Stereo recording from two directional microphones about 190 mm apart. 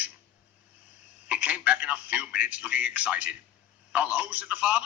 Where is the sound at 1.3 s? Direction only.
10° right (ahead or behind).